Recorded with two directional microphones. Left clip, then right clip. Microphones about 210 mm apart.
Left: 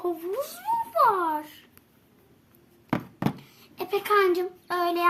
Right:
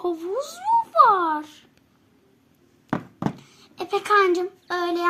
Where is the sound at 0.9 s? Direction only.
25° right (ahead or behind).